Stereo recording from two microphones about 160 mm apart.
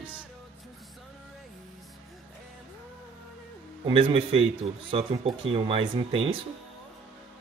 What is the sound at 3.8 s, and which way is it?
Speech, 30° right (ahead or behind).